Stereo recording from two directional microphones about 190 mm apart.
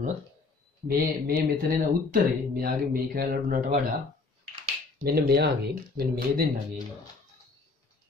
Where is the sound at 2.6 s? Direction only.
50° right (ahead or behind).